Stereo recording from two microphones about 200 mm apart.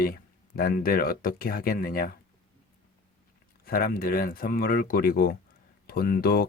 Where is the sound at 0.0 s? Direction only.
45° left (ahead or behind).